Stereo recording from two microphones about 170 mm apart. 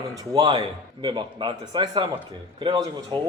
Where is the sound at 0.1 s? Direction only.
25° right (ahead or behind).